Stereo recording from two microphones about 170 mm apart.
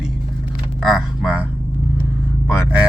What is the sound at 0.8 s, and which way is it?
Speech, centre (ahead or behind).